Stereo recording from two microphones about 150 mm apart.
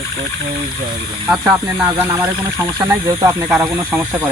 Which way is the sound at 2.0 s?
20° right (ahead or behind).